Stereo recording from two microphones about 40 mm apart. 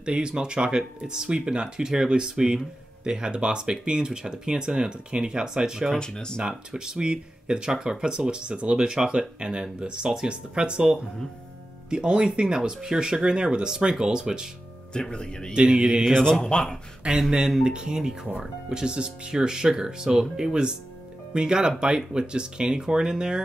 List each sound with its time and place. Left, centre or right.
0.0 s speech: right
5.9 s speech: centre
6.4 s speech: centre
15.0 s speech: left
15.5 s speech: right
16.1 s speech: centre
17.0 s speech: right